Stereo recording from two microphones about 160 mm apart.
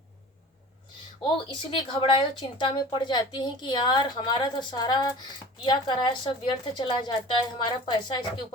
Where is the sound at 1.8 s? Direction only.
30° left (ahead or behind).